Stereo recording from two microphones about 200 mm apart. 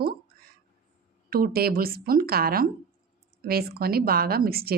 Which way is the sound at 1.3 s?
50° right (ahead or behind).